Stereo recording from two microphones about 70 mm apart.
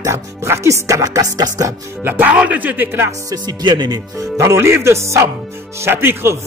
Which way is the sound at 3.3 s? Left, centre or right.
Right.